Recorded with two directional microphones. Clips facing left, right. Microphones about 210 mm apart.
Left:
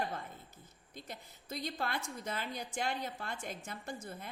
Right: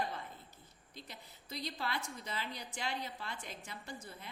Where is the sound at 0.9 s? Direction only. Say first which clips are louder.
Left 4 dB; 50° left (ahead or behind).